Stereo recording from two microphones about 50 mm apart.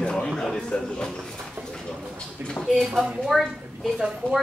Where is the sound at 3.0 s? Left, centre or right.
Centre.